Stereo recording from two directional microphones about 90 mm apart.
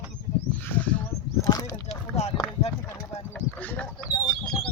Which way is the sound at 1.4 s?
45° left (ahead or behind).